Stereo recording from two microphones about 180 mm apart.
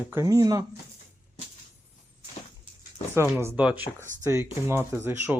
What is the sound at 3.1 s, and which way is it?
Speech, 15° right (ahead or behind).